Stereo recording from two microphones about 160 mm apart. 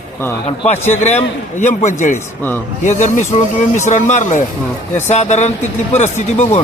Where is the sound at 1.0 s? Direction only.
45° left (ahead or behind).